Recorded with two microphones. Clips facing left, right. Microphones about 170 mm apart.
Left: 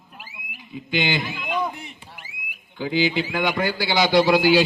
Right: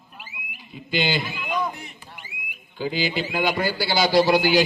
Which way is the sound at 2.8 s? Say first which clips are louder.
Left 3 dB; 65° left (ahead or behind).